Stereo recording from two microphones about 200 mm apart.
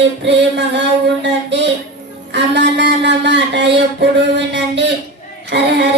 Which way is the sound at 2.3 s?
60° right (ahead or behind).